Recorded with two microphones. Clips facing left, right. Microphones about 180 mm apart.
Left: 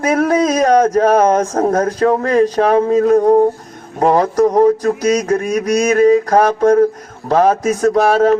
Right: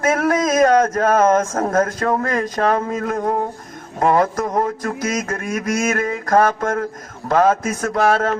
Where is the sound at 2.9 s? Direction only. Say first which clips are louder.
Left 11 dB; 35° left (ahead or behind).